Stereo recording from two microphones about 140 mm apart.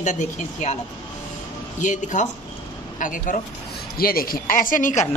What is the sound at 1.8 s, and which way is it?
A woman's voice, 65° left (ahead or behind).